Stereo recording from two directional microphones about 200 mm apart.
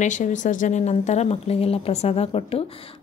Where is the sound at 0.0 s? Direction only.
35° left (ahead or behind).